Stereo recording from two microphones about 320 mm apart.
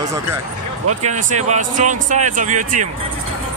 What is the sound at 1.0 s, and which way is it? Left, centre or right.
Speech, right.